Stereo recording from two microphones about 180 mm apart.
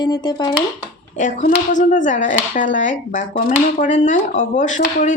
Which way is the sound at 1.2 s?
45° left (ahead or behind).